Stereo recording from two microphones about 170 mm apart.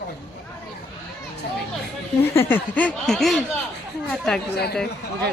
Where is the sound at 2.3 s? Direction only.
10° left (ahead or behind).